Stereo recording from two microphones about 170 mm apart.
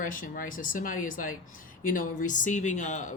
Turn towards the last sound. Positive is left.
turn(degrees=45)  # may be behind; listen again after turning